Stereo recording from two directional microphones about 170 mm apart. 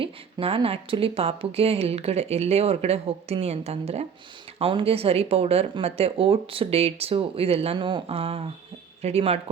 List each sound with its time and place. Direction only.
0.0 s speech: 35° right (ahead or behind)